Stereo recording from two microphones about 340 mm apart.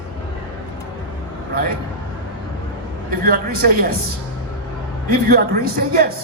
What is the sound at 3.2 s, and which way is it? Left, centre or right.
Speech, right.